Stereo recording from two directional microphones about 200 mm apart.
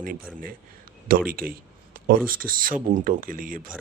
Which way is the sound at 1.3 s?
45° right (ahead or behind).